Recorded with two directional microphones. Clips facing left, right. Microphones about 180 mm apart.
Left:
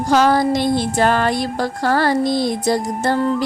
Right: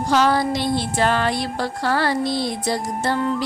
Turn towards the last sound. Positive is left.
turn(degrees=45)  # may be behind; listen again after turning